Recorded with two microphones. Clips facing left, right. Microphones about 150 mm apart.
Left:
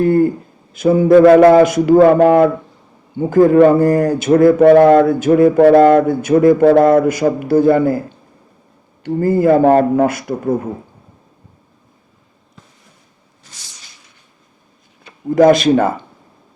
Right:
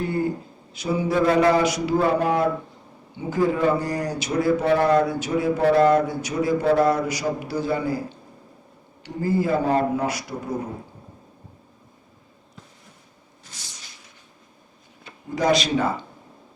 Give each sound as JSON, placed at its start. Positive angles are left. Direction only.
{"t": 0.0, "sound": "a man's voice", "side_deg": 50}
{"t": 9.0, "sound": "a man's voice", "side_deg": 55}
{"t": 13.5, "sound": "a sound", "side_deg": 85}
{"t": 15.4, "sound": "a man's voice", "side_deg": 50}